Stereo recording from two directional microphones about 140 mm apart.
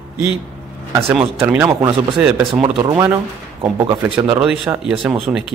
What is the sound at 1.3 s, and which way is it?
Speech, 15° right (ahead or behind).